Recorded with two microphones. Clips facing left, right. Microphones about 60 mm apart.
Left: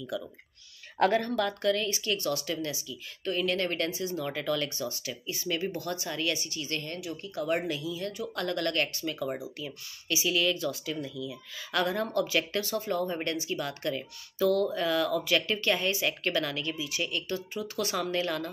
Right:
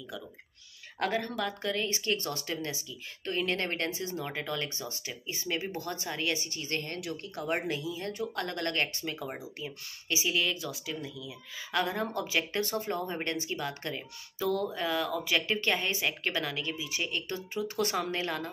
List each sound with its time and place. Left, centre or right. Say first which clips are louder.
0.9 s speech: left 6 dB; centre
1.9 s speech: left 2 dB; right
4.3 s speech: left 4 dB; right
7.0 s speech: even; right
7.3 s speech: left 3 dB; right